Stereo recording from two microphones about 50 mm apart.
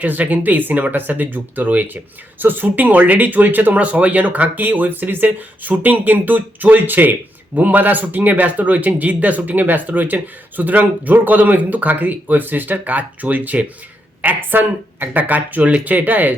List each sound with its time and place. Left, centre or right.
0.0 s speech: right
15.2 s speech: right